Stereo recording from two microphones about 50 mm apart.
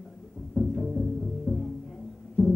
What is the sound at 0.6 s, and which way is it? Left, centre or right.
Music, centre.